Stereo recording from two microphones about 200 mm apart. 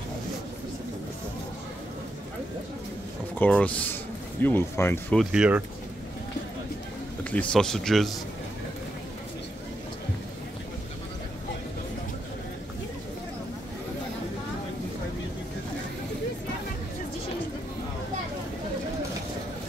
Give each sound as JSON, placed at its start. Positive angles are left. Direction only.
{"t": 3.3, "sound": "speech", "side_deg": 5}
{"t": 5.2, "sound": "speech", "side_deg": -5}
{"t": 7.2, "sound": "speech", "side_deg": 5}